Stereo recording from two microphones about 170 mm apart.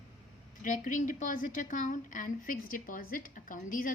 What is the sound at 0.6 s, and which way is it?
A woman's voice, 50° left (ahead or behind).